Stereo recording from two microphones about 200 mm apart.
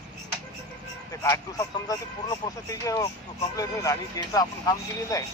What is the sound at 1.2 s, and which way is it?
A man's voice, 15° left (ahead or behind).